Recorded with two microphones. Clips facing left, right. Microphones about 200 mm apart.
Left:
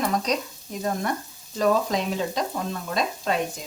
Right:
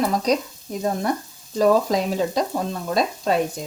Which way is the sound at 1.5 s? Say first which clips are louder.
Right 4 dB; 35° right (ahead or behind).